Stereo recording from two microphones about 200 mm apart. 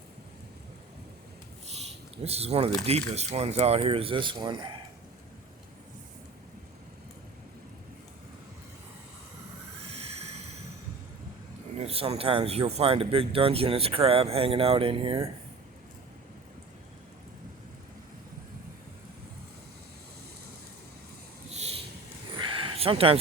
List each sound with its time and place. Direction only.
2.2 s speech: 30° right (ahead or behind)
11.8 s speech: 30° right (ahead or behind)
21.5 s a sound: 30° right (ahead or behind)